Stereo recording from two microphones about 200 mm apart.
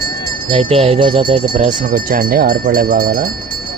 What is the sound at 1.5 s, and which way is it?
Speech, 40° right (ahead or behind).